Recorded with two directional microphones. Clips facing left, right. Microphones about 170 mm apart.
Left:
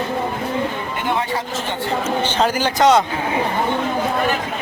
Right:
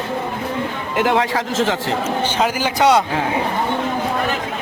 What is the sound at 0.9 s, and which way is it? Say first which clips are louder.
Speech: right 7 dB; 90° right.